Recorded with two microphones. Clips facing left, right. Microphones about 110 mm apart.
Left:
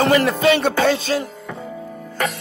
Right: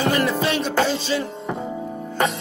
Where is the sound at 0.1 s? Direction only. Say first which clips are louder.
Left 5 dB; 70° left (ahead or behind); by 1.2 s 55° left (ahead or behind).